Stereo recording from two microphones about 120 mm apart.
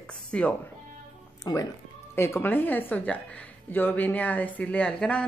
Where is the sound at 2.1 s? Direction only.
20° left (ahead or behind).